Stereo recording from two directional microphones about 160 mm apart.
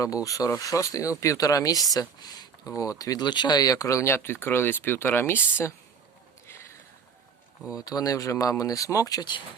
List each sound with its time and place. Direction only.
0.0 s speech: 20° left (ahead or behind)
7.8 s speech: 25° left (ahead or behind)